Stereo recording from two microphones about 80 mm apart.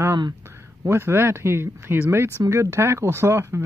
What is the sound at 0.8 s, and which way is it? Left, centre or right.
Speech, right.